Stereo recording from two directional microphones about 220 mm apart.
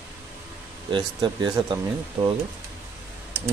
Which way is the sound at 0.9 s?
20° right (ahead or behind).